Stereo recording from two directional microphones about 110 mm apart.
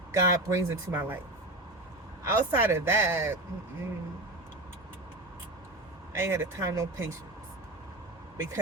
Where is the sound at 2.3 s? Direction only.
20° right (ahead or behind).